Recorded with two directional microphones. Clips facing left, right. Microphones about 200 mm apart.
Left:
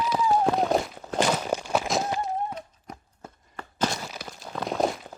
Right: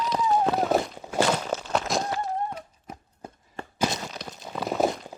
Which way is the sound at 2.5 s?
5° right (ahead or behind).